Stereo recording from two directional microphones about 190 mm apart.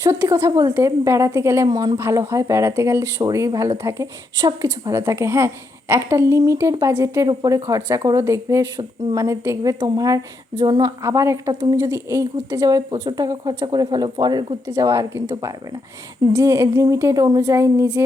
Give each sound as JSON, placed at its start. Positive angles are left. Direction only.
{"t": 0.0, "sound": "a woman's voice", "side_deg": -15}